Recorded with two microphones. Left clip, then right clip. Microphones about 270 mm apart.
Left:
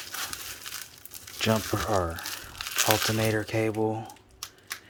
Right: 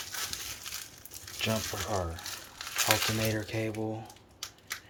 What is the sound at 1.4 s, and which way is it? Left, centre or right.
Crumpling, left.